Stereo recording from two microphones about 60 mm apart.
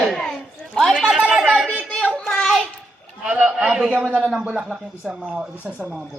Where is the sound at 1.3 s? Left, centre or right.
Centre.